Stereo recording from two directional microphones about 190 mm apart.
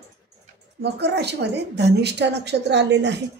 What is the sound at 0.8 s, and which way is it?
A woman's voice, 60° right (ahead or behind).